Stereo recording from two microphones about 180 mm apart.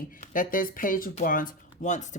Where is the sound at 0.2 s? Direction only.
50° left (ahead or behind).